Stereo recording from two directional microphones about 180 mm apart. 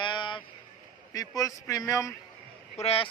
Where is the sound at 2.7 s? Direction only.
35° left (ahead or behind).